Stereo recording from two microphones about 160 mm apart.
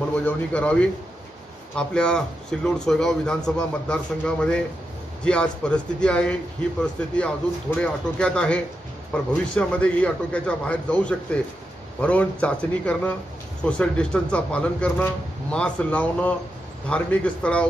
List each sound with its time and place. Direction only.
0.1 s a man's voice: 10° left (ahead or behind)